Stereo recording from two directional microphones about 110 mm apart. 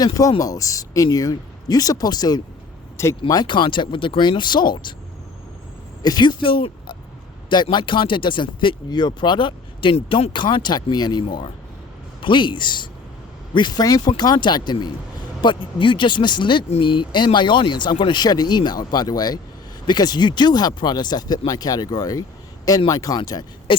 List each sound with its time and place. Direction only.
0.0 s speech: 35° left (ahead or behind)
6.0 s speech: 40° left (ahead or behind)
11.2 s speech: 55° left (ahead or behind); by 23.5 s 35° left (ahead or behind)